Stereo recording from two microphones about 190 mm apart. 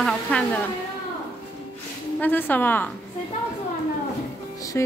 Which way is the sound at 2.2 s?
10° left (ahead or behind).